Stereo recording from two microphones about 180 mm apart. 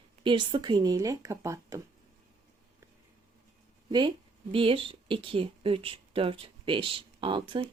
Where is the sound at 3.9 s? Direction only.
25° right (ahead or behind).